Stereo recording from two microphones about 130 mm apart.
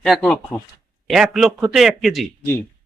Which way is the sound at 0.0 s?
5° left (ahead or behind).